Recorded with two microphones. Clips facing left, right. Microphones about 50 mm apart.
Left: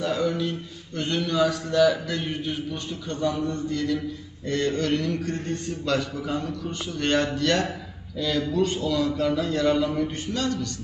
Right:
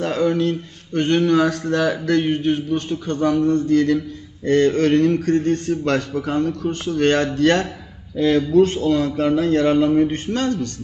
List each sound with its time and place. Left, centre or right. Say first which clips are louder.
0.0 s a man's voice: right 6 dB; right